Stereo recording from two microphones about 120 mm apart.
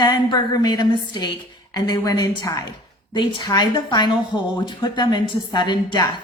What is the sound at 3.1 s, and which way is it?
Speech, 40° left (ahead or behind).